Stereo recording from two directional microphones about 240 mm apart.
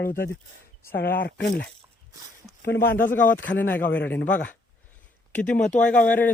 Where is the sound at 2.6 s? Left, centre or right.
Left.